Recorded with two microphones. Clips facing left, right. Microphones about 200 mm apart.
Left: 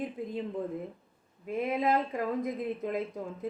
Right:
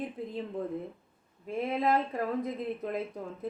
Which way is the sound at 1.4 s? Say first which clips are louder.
Even; 15° left (ahead or behind).